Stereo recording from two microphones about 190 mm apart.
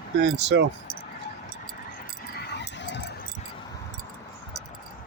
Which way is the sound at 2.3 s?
60° left (ahead or behind).